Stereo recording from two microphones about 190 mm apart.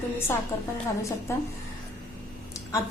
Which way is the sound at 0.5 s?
15° left (ahead or behind).